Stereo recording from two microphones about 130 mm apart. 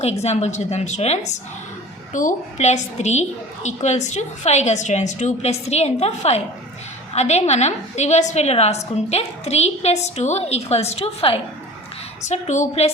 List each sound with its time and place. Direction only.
0.0 s a woman's voice: 55° left (ahead or behind)
2.1 s a woman's voice: 70° left (ahead or behind); by 11.3 s 45° left (ahead or behind)
12.3 s a woman's voice: 60° left (ahead or behind)